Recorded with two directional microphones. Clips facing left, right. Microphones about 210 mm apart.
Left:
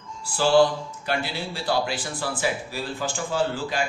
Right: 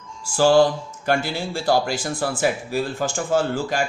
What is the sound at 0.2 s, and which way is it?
A man's voice, 45° right (ahead or behind).